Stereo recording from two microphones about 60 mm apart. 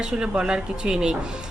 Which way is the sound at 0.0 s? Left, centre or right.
Centre.